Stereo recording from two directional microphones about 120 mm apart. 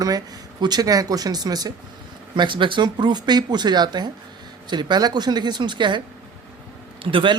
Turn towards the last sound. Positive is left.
turn(degrees=-45)  # may be behind; listen again after turning